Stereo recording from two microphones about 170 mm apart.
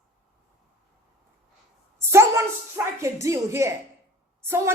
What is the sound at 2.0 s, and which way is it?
A woman's voice, 15° right (ahead or behind).